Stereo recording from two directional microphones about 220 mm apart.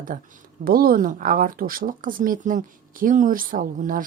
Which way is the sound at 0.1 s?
40° right (ahead or behind).